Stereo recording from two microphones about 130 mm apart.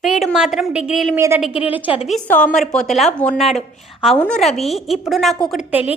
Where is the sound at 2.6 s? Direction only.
5° left (ahead or behind).